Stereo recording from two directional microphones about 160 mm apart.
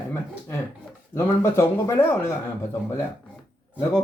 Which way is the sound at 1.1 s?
15° left (ahead or behind).